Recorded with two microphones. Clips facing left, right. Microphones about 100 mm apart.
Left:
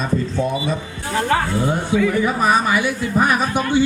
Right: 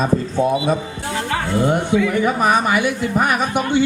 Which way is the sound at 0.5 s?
60° right (ahead or behind).